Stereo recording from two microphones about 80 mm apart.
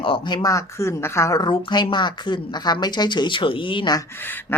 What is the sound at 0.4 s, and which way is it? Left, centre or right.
Speech, left.